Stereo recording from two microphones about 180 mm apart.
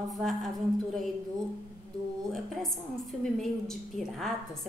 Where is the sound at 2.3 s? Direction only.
Centre (ahead or behind).